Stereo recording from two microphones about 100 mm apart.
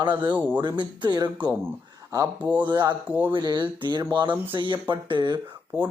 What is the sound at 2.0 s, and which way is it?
Speech, 30° right (ahead or behind).